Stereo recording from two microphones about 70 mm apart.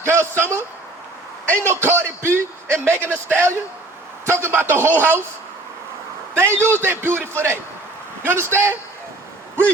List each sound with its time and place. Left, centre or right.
0.0 s speech: right
1.6 s speech: right
6.3 s a man's voice: right